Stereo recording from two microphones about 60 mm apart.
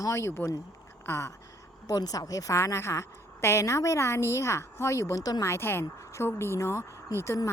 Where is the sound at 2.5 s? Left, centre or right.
Left.